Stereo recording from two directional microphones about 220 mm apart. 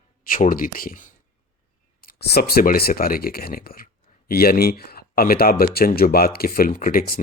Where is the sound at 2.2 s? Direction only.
45° left (ahead or behind).